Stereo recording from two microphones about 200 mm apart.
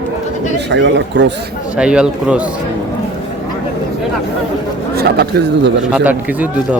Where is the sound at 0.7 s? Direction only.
60° right (ahead or behind).